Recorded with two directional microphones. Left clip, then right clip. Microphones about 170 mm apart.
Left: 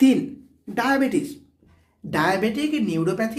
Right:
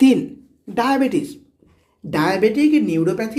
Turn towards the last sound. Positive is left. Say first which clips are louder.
# right 4 dB
turn(degrees=-10)  # may be behind; listen again after turning